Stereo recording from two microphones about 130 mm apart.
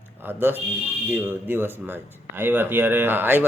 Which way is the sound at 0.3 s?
15° right (ahead or behind).